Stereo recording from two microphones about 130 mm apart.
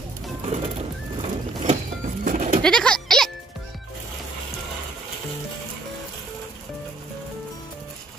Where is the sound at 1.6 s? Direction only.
65° right (ahead or behind); by 2.6 s 85° right.